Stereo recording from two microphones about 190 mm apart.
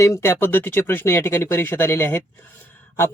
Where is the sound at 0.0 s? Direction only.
15° left (ahead or behind).